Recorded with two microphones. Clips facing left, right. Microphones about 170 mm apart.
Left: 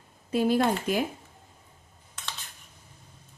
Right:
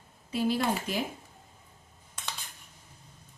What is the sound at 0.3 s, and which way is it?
Speech, 50° left (ahead or behind).